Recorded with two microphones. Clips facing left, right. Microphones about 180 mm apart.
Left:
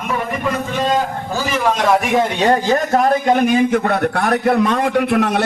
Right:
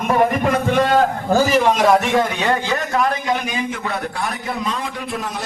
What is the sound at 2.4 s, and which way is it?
A man's voice, 40° left (ahead or behind).